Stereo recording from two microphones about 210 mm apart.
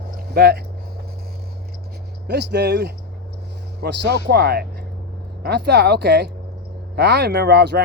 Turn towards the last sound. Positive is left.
turn(degrees=-50)  # may be behind; listen again after turning